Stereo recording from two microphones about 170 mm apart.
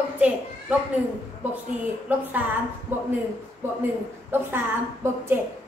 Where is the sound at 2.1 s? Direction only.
10° right (ahead or behind).